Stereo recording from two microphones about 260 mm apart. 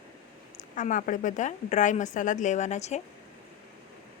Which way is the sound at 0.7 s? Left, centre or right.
Left.